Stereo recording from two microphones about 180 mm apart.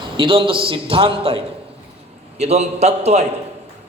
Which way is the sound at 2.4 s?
35° right (ahead or behind).